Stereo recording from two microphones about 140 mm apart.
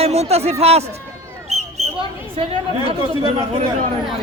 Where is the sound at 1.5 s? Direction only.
50° right (ahead or behind).